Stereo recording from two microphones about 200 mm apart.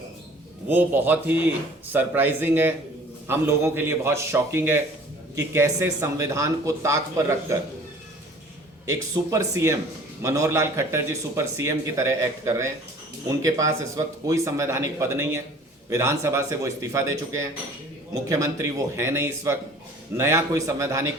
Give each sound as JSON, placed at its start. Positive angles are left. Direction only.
{"t": 0.7, "sound": "a man's voice", "side_deg": -10}
{"t": 8.9, "sound": "a man's voice", "side_deg": -15}